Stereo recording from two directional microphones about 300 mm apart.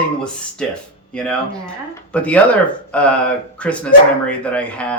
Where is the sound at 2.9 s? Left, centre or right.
Centre.